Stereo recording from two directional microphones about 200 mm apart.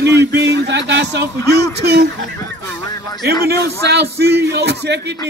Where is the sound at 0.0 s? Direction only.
60° right (ahead or behind).